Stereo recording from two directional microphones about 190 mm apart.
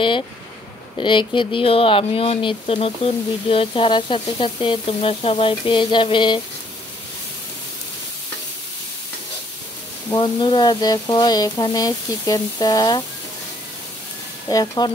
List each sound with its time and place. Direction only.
0.9 s speech: 25° left (ahead or behind)
10.1 s speech: 25° left (ahead or behind)
14.5 s speech: 20° left (ahead or behind)